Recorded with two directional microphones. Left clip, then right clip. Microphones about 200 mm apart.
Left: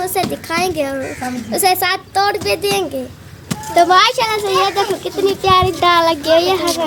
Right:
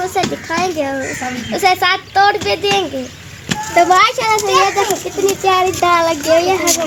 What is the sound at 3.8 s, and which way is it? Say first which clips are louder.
A child's voice: even; centre (ahead or behind).